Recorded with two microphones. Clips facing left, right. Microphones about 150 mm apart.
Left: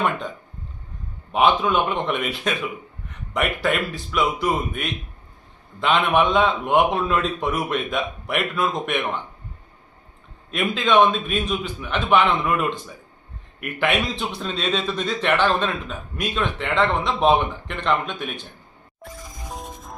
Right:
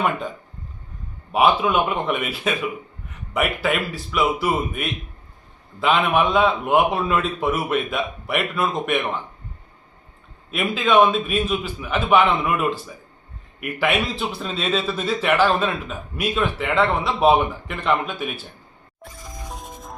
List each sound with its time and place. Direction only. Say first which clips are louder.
1.3 s a man's voice: right 1 dB; 5° right (ahead or behind)
10.5 s a man's voice: right 1 dB; 5° right (ahead or behind)
19.5 s music: left 3 dB; centre (ahead or behind)